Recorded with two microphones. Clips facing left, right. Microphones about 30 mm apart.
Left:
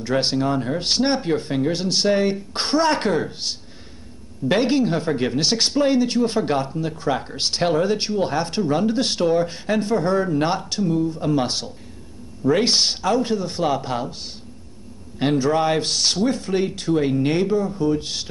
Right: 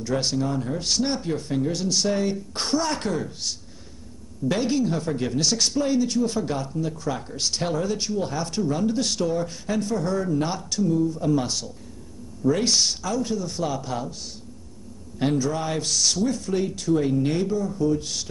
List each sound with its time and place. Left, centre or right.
0.0 s speech: left